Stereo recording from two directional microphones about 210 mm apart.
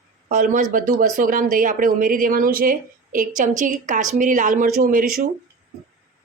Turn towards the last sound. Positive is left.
turn(degrees=-45)  # may be behind; listen again after turning